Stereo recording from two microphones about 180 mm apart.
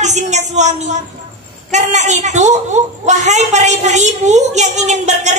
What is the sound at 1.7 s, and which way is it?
A woman's voice, 40° right (ahead or behind).